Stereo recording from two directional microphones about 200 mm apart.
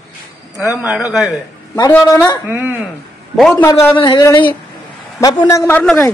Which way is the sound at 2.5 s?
10° right (ahead or behind).